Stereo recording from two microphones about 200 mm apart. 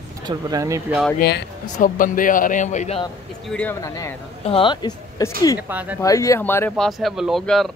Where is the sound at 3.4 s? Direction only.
5° left (ahead or behind).